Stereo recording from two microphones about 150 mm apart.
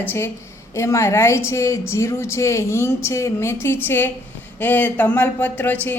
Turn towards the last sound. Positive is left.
turn(degrees=10)  # may be behind; listen again after turning